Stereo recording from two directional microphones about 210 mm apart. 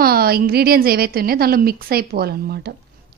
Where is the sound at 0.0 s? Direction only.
45° right (ahead or behind).